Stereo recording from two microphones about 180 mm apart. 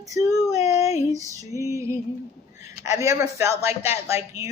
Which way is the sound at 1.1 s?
20° right (ahead or behind).